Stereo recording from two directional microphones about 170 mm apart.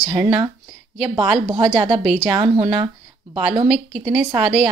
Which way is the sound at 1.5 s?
30° right (ahead or behind).